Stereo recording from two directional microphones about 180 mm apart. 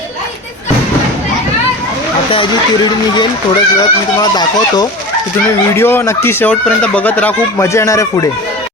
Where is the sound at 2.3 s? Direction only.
25° left (ahead or behind).